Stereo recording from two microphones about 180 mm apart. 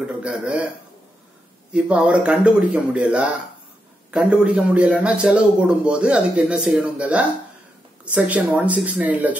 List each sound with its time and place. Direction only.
0.0 s a man's voice: 5° right (ahead or behind)
1.7 s a man's voice: 5° right (ahead or behind)